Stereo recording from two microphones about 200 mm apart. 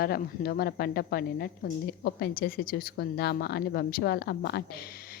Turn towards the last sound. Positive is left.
turn(degrees=50)  # may be behind; listen again after turning